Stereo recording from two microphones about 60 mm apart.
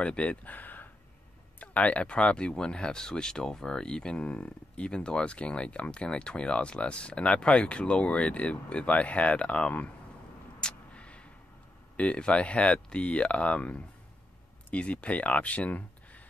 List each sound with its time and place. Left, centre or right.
0.0 s speech: left
10.6 s a sound: centre
12.0 s speech: centre